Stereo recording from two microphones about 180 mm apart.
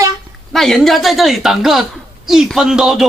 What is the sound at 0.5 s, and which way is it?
Speech, centre (ahead or behind).